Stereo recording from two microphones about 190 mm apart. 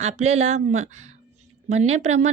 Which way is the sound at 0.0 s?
35° right (ahead or behind).